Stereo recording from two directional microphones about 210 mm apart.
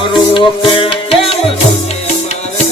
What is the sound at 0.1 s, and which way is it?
Music, 25° left (ahead or behind).